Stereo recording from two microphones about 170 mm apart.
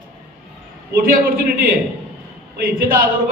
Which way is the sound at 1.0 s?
60° right (ahead or behind).